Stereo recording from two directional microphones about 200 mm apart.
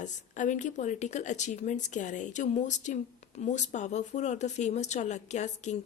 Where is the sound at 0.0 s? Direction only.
40° left (ahead or behind).